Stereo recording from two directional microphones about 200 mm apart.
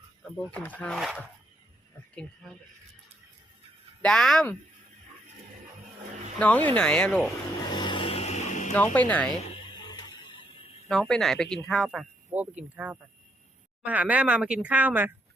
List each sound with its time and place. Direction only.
0.3 s speech: 5° left (ahead or behind)
4.0 s speech: 5° left (ahead or behind)
6.4 s speech: 5° left (ahead or behind)
7.7 s a sound: 20° left (ahead or behind)
8.7 s speech: 10° left (ahead or behind)
9.7 s a sound: 20° left (ahead or behind)
10.8 s speech: 5° left (ahead or behind)